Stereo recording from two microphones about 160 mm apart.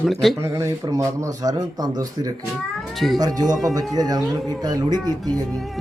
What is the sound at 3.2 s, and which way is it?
Speech, 25° right (ahead or behind).